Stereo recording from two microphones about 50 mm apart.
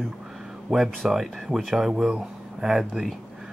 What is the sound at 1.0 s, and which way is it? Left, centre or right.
Speech, centre.